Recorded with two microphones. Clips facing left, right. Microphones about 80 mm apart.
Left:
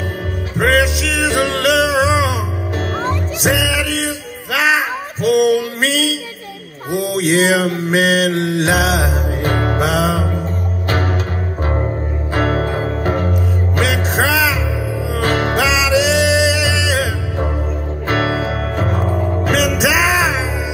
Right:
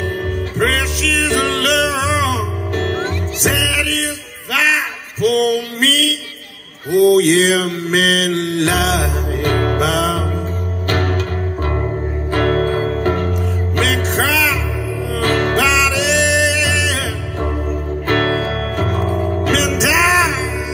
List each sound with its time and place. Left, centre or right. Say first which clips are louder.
0.6 s music: left 5 dB; centre
4.6 s a sound: left 2 dB; centre
7.0 s mantra: right 5 dB; centre
10.9 s music: right 1 dB; centre
12.4 s music: right 2 dB; centre